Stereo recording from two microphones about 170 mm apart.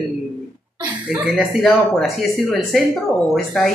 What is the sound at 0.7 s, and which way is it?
Speech, 5° right (ahead or behind).